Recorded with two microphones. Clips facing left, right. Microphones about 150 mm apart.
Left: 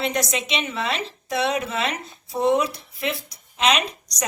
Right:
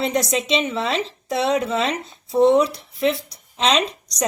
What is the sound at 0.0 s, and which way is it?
A woman's voice, 30° right (ahead or behind).